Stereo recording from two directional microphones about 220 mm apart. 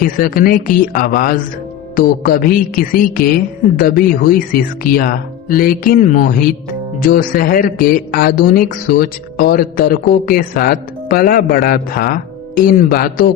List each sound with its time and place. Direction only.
0.0 s a man's voice: 40° left (ahead or behind)